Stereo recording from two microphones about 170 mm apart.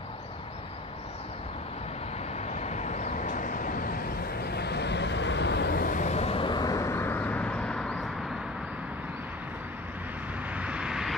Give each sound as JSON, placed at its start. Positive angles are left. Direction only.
{"t": 2.3, "sound": "vehicle", "side_deg": 40}
{"t": 10.5, "sound": "vehicle", "side_deg": -5}